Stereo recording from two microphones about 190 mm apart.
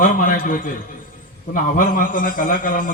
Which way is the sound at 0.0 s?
45° left (ahead or behind).